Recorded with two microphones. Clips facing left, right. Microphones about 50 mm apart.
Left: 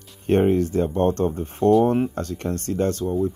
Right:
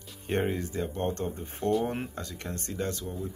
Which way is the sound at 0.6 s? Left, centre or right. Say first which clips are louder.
Left 11 dB; left.